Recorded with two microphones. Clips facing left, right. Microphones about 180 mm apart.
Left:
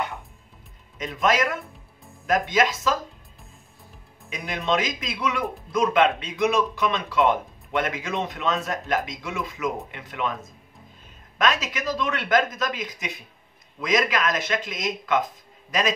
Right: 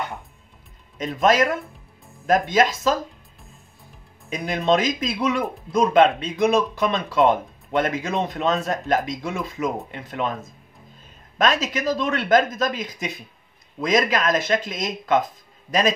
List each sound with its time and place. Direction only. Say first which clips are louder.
0.9 s speech: right 4 dB; 35° right (ahead or behind)
4.3 s speech: right 5 dB; 40° right (ahead or behind)
11.3 s speech: right 3 dB; 35° right (ahead or behind)